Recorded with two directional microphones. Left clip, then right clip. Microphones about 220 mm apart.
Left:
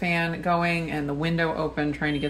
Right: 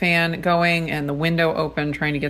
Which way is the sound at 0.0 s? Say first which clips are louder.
Right 6 dB; 45° right (ahead or behind).